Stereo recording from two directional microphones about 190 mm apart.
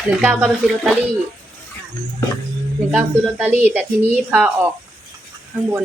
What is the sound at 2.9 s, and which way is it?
A woman's voice, 10° right (ahead or behind).